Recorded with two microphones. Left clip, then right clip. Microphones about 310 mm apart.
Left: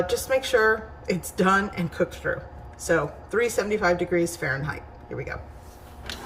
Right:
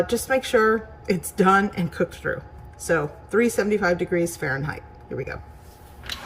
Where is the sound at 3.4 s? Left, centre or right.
Centre.